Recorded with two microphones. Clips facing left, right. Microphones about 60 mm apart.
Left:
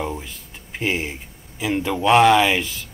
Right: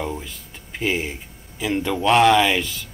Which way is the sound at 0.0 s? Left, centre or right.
Centre.